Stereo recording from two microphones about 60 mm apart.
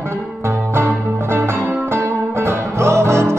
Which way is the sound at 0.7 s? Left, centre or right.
Right.